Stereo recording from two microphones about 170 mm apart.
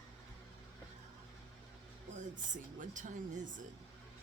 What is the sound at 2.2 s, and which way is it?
Speech, 50° right (ahead or behind).